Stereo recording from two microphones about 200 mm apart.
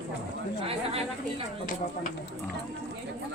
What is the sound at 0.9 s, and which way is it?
Speech, 30° right (ahead or behind).